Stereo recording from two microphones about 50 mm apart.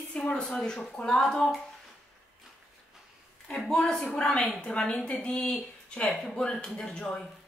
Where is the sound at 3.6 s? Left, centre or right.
Centre.